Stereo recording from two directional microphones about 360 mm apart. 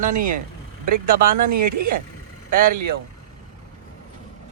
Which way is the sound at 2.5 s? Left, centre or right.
Right.